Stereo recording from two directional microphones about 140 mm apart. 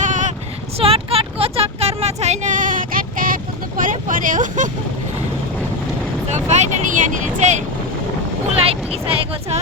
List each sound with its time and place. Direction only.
0.0 s a sound: 65° right (ahead or behind)
0.8 s vehicle: 45° right (ahead or behind); by 4.7 s 65° right (ahead or behind)
6.2 s speech: 55° right (ahead or behind)
8.6 s speech: 45° right (ahead or behind)